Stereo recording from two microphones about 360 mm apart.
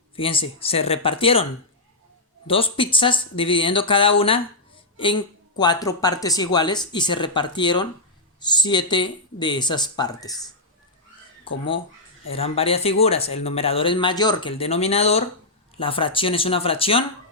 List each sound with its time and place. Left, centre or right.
0.2 s speech: centre
2.5 s speech: centre
11.4 s speech: centre